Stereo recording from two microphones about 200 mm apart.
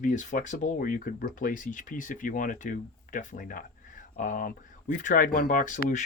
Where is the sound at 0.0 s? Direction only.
40° left (ahead or behind).